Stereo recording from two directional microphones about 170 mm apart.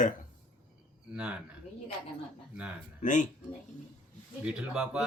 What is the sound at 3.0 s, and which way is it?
Speech, 50° left (ahead or behind).